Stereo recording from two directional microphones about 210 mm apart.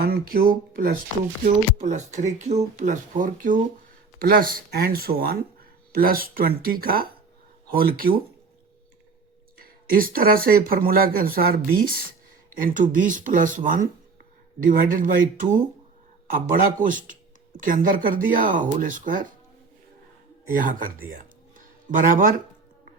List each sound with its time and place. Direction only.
0.0 s speech: 45° right (ahead or behind)
9.6 s speech: 45° right (ahead or behind)
20.5 s speech: 40° right (ahead or behind)
21.6 s a sound: 40° right (ahead or behind)